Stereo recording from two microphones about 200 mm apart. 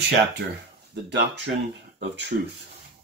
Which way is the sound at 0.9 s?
55° right (ahead or behind).